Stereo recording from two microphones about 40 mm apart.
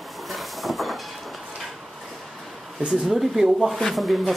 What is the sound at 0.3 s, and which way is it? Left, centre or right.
Train, centre.